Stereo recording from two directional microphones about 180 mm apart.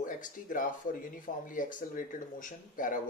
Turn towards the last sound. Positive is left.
turn(degrees=50)  # may be behind; listen again after turning